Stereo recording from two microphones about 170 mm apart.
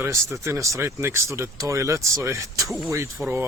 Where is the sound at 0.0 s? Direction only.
15° right (ahead or behind).